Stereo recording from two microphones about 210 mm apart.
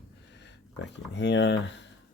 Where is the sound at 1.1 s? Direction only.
55° left (ahead or behind).